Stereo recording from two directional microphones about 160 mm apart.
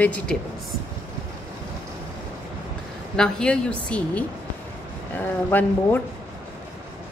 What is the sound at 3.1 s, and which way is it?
A woman's voice, 5° left (ahead or behind).